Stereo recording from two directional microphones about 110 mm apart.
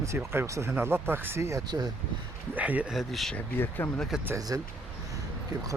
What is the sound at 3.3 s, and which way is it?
Speech, 20° left (ahead or behind).